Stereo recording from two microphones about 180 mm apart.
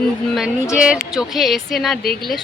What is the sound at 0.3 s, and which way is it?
Speech, 5° right (ahead or behind).